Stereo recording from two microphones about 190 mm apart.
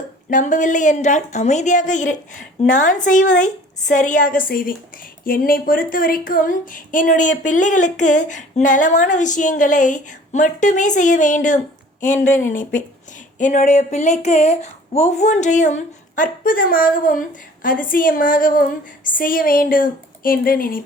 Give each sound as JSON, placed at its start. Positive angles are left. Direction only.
{"t": 0.3, "sound": "a woman's voice", "side_deg": 40}